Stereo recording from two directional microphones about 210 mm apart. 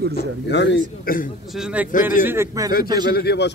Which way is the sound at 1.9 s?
40° left (ahead or behind).